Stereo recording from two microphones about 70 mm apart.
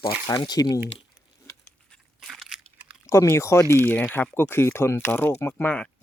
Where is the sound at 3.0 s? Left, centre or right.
Left.